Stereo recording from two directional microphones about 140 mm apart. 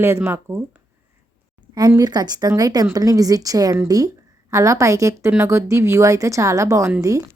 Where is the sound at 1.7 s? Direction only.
25° right (ahead or behind).